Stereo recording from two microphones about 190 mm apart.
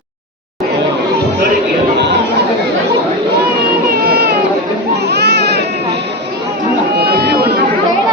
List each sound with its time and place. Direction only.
4.1 s baby cry: 55° right (ahead or behind)
7.0 s run: 55° right (ahead or behind)